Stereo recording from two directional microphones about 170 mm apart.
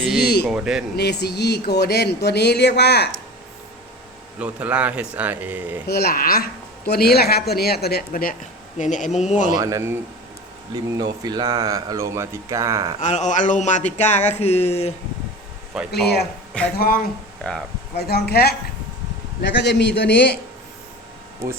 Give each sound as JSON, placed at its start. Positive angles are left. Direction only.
{"t": 0.2, "sound": "speech", "side_deg": 65}
{"t": 0.4, "sound": "speech", "side_deg": -5}
{"t": 0.9, "sound": "speech", "side_deg": 75}
{"t": 4.4, "sound": "speech", "side_deg": -5}
{"t": 5.9, "sound": "speech", "side_deg": 70}
{"t": 8.8, "sound": "a sound", "side_deg": 45}
{"t": 9.6, "sound": "speech", "side_deg": -20}
{"t": 13.0, "sound": "a sound", "side_deg": 45}
{"t": 15.7, "sound": "speech", "side_deg": -5}
{"t": 16.7, "sound": "speech", "side_deg": 60}
{"t": 19.4, "sound": "a man's voice", "side_deg": 90}